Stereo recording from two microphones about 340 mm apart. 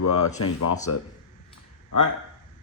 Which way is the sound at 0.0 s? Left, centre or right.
Left.